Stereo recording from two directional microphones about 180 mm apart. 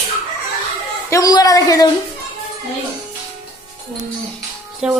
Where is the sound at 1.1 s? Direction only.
20° left (ahead or behind).